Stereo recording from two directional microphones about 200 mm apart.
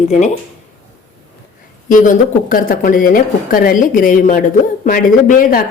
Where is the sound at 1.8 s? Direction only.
40° left (ahead or behind).